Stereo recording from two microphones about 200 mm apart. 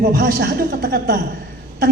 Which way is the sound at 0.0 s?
50° right (ahead or behind).